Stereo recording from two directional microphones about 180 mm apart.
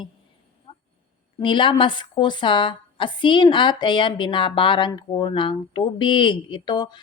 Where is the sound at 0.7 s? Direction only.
30° left (ahead or behind).